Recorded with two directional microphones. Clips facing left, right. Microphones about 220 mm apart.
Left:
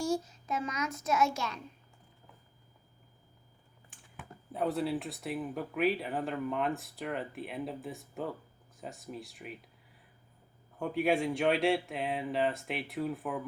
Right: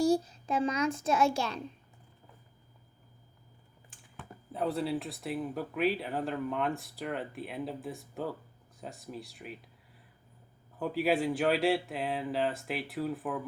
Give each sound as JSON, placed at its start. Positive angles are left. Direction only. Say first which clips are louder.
{"t": 0.0, "sound": "a child's voice", "louder": "right 6 dB", "side_deg": -35}
{"t": 4.5, "sound": "speech", "louder": "even", "side_deg": 0}
{"t": 10.8, "sound": "speech", "louder": "even", "side_deg": 0}